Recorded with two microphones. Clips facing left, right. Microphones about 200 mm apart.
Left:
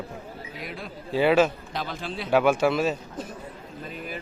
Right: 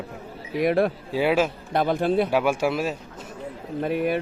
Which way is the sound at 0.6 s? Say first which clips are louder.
Right 19 dB; 65° right (ahead or behind).